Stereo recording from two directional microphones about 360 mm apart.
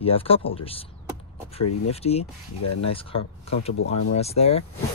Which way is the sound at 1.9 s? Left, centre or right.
Centre.